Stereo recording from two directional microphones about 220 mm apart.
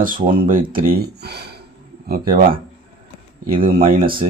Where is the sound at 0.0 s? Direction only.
40° right (ahead or behind).